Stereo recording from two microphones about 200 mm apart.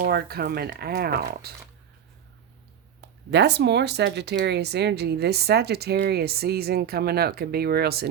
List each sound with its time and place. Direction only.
0.0 s speech: 50° right (ahead or behind)
3.2 s speech: 55° right (ahead or behind)